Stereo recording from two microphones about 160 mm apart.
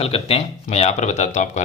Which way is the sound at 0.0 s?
40° left (ahead or behind).